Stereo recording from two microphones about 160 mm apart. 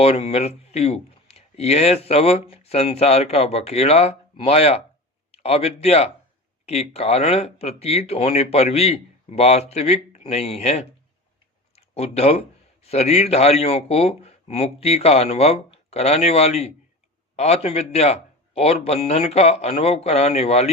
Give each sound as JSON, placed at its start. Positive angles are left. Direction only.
{"t": 0.0, "sound": "speech", "side_deg": 40}
{"t": 11.7, "sound": "a sound", "side_deg": 40}
{"t": 12.8, "sound": "speech", "side_deg": 40}